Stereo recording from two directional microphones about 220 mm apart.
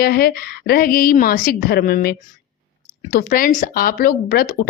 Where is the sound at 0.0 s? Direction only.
45° left (ahead or behind).